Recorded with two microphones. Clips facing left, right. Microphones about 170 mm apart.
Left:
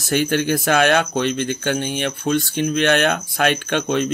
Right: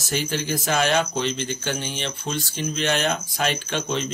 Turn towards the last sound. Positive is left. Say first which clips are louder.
# left 6 dB
turn(degrees=55)  # may be behind; listen again after turning